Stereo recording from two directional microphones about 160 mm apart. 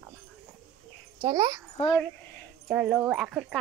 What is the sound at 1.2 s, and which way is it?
Speech, 20° right (ahead or behind).